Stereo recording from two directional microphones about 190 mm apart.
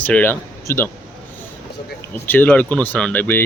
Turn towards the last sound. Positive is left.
turn(degrees=10)  # may be behind; listen again after turning